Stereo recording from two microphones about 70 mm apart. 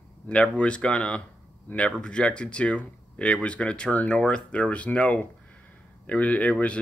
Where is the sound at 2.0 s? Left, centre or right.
Centre.